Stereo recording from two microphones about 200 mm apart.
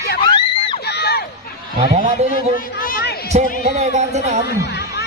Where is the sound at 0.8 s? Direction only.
55° left (ahead or behind).